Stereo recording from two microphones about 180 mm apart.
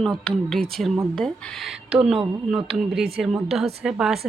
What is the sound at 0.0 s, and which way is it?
Speech, 5° left (ahead or behind).